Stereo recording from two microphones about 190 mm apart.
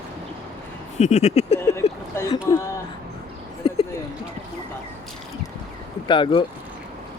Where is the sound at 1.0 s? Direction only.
35° left (ahead or behind).